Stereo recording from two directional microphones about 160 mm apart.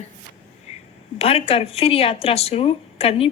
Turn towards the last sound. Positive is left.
turn(degrees=35)  # may be behind; listen again after turning